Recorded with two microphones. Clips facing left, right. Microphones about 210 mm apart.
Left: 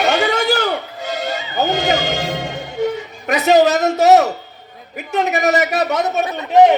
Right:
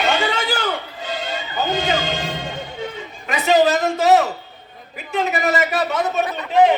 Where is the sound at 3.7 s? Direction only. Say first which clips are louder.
Left 4 dB; 40° left (ahead or behind).